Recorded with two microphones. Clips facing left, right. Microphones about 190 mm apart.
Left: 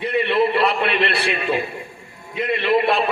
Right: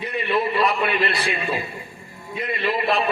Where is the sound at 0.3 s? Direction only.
70° left (ahead or behind).